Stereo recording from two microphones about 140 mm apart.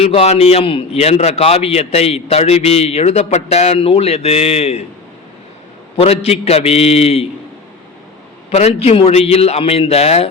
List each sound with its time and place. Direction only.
0.0 s a man's voice: 45° left (ahead or behind)
6.0 s a man's voice: 45° left (ahead or behind)
8.4 s a man's voice: 50° left (ahead or behind)